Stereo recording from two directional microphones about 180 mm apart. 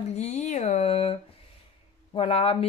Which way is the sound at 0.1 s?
40° left (ahead or behind).